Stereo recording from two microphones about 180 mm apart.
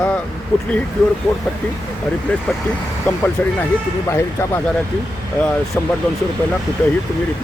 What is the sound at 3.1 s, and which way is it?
Speech, 10° left (ahead or behind).